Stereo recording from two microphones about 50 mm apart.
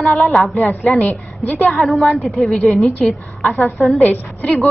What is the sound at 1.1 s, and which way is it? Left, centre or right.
Speech, left.